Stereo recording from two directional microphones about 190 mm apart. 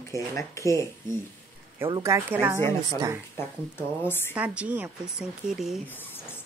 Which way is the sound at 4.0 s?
10° left (ahead or behind).